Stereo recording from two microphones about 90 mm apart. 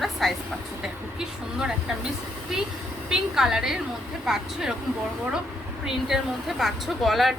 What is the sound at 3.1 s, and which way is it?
A woman's voice, 5° right (ahead or behind).